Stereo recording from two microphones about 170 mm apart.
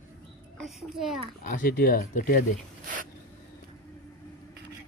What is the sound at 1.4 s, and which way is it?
A man's voice, 50° left (ahead or behind).